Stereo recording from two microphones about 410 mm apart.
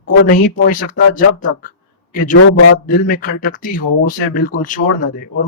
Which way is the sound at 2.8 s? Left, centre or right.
Centre.